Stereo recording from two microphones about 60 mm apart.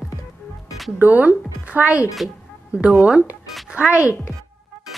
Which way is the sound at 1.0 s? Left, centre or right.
Right.